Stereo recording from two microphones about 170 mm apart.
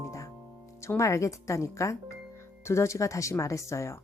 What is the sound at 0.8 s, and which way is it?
Speech, 15° left (ahead or behind).